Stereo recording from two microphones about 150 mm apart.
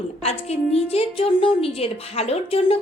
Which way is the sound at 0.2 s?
45° left (ahead or behind).